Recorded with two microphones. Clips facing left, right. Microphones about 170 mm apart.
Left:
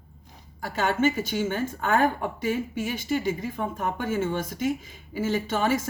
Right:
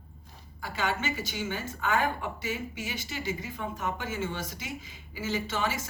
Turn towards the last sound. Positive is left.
turn(degrees=50)  # may be behind; listen again after turning